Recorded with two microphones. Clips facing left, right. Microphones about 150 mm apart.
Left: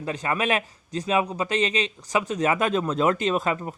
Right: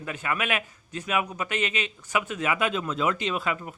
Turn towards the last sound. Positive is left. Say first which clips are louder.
# left 5 dB
turn(degrees=40)  # may be behind; listen again after turning